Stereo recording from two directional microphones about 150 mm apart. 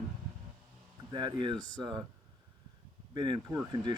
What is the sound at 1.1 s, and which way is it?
Speech, 30° right (ahead or behind).